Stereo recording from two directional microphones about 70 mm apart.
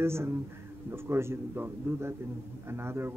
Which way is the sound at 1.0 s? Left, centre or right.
Right.